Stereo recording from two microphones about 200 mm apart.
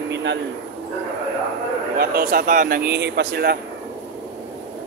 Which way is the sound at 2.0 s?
45° right (ahead or behind).